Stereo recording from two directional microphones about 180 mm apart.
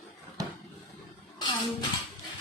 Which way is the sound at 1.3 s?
25° left (ahead or behind).